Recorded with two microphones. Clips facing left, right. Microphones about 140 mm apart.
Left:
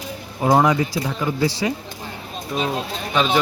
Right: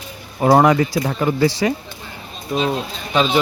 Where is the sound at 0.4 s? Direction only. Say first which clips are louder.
Right 4 dB; 60° right (ahead or behind).